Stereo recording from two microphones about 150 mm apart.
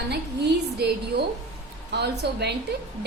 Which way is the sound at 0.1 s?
90° right.